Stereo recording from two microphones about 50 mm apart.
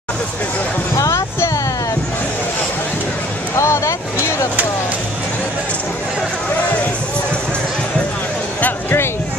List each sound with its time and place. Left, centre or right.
0.9 s music: left
3.5 s vehicle: left